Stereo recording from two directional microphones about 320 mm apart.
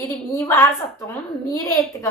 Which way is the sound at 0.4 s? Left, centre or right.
Centre.